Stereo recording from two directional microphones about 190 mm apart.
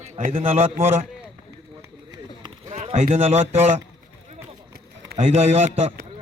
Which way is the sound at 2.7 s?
30° right (ahead or behind).